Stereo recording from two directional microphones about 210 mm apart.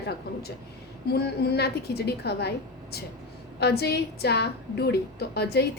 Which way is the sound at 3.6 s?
50° left (ahead or behind).